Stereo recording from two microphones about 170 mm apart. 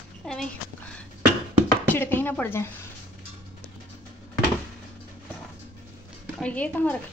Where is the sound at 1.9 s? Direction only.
10° left (ahead or behind).